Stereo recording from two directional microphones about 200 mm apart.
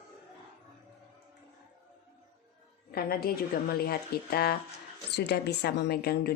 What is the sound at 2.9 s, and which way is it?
A woman's voice, 50° left (ahead or behind).